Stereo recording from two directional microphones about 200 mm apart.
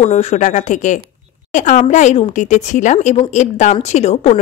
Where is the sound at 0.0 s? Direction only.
35° left (ahead or behind).